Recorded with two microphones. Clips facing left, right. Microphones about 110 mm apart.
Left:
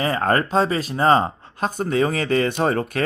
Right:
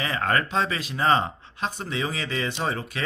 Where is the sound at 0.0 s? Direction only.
40° left (ahead or behind).